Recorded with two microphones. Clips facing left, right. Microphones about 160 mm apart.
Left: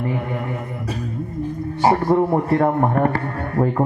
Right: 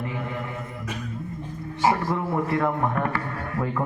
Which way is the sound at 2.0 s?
45° left (ahead or behind).